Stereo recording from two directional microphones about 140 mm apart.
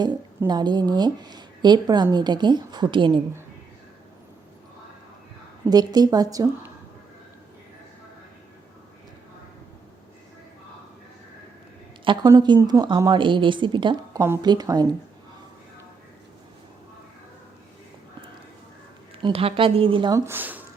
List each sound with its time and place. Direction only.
0.4 s speech: 30° right (ahead or behind)
5.6 s speech: 30° right (ahead or behind)
12.0 s speech: 30° right (ahead or behind)
19.2 s speech: 40° right (ahead or behind)
20.1 s speech: 15° right (ahead or behind)